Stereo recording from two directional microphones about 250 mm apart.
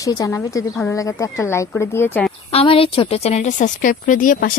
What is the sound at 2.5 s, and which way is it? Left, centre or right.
A woman's voice, left.